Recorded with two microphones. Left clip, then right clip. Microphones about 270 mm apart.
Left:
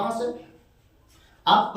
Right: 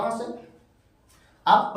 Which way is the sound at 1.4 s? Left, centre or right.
Centre.